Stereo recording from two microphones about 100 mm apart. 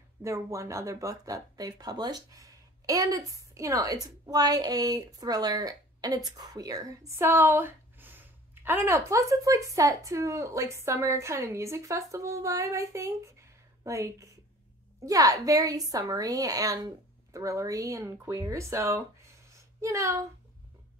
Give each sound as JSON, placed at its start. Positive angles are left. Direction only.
{"t": 0.2, "sound": "a woman's voice", "side_deg": -30}